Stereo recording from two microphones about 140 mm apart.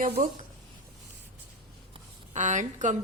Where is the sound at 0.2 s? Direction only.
90° right.